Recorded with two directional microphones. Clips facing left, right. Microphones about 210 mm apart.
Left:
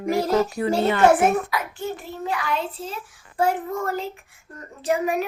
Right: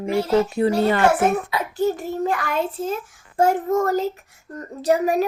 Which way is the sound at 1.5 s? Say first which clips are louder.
Right 6 dB; 40° right (ahead or behind).